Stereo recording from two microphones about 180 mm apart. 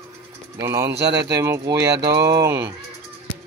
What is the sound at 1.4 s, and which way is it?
Speech, 15° right (ahead or behind).